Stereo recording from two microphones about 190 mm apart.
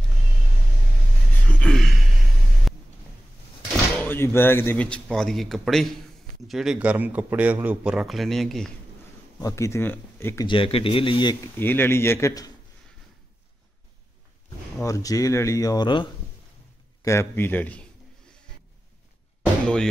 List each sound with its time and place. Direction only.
1.6 s gasp: 5° left (ahead or behind)
2.7 s a sound: centre (ahead or behind)
4.0 s a man's voice: 10° left (ahead or behind)
9.4 s speech: 15° left (ahead or behind)
10.4 s speech: 25° left (ahead or behind)
11.5 s speech: 10° left (ahead or behind)
14.8 s speech: 15° left (ahead or behind)